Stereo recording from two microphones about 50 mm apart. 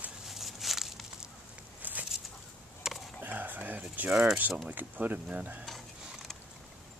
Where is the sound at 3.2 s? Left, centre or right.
Right.